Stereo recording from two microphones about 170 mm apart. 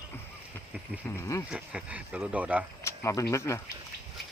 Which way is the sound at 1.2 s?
20° left (ahead or behind).